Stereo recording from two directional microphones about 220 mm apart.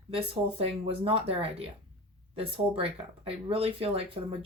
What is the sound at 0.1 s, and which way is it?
Speech, 25° right (ahead or behind).